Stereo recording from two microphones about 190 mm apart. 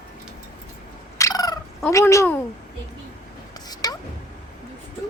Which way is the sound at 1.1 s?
20° left (ahead or behind).